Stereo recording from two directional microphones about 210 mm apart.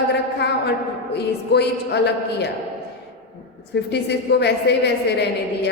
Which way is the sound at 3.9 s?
55° left (ahead or behind).